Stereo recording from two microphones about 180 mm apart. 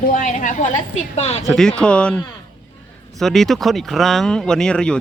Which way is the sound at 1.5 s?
5° left (ahead or behind).